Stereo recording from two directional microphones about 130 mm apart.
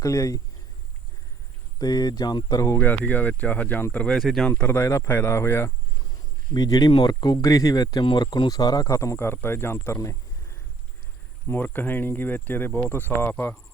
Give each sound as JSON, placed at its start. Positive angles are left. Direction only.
{"t": 0.0, "sound": "speech", "side_deg": 25}
{"t": 1.8, "sound": "speech", "side_deg": 30}
{"t": 11.4, "sound": "speech", "side_deg": 15}